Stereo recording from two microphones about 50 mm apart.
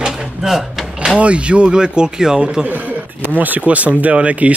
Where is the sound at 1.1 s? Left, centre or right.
Right.